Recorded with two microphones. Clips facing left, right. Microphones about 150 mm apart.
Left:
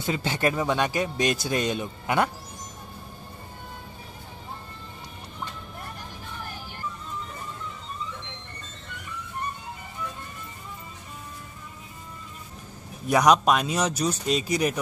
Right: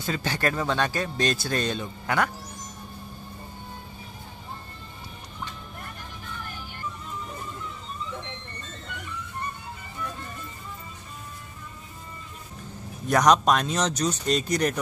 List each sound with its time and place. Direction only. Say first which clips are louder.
0.0 s speech: left 2 dB; 20° left (ahead or behind)
13.1 s speech: even; 5° left (ahead or behind)